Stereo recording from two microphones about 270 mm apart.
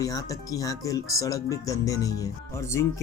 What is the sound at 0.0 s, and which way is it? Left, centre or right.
Speech, centre.